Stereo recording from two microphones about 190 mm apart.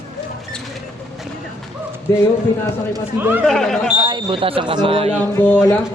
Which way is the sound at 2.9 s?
10° right (ahead or behind).